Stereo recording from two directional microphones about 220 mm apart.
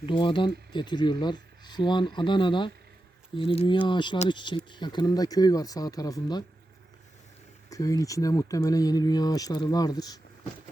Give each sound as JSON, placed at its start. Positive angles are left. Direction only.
{"t": 0.0, "sound": "speech", "side_deg": 20}
{"t": 7.7, "sound": "speech", "side_deg": 15}